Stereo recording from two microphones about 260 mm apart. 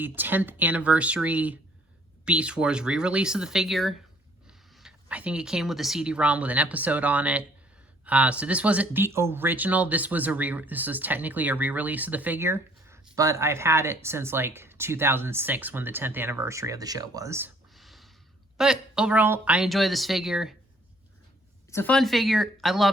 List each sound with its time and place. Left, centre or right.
0.0 s speech: centre
21.7 s speech: centre